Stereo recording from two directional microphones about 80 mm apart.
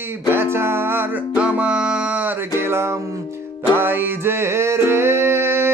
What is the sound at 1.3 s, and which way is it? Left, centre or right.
Music, centre.